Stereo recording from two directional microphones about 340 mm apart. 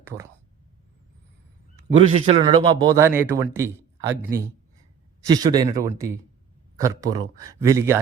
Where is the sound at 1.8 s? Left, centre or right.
Centre.